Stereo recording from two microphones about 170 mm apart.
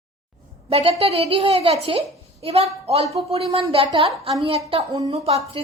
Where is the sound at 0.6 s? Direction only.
35° right (ahead or behind).